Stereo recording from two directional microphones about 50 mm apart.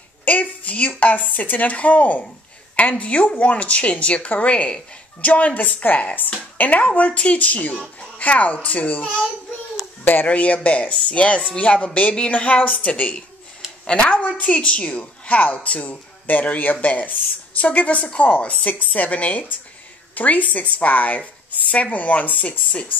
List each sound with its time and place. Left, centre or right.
0.2 s a woman's voice: left
10.2 s a woman's voice: left